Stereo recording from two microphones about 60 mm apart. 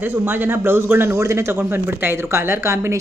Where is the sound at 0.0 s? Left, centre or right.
Right.